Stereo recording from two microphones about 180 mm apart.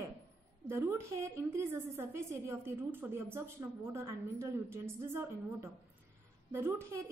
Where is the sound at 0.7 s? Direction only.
15° right (ahead or behind).